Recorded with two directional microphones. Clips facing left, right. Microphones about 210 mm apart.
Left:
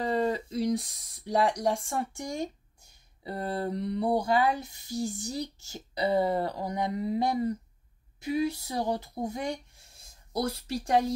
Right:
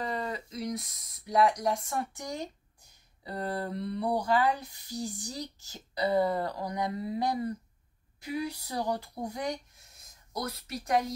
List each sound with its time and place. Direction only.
0.0 s speech: 30° left (ahead or behind)